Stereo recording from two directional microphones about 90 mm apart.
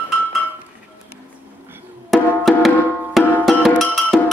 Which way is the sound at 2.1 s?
Centre (ahead or behind).